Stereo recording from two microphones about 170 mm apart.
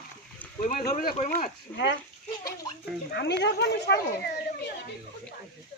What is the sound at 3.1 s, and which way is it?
Speech, 85° left.